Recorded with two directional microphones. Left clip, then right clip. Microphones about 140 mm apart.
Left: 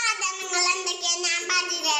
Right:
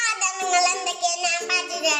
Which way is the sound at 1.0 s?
5° right (ahead or behind).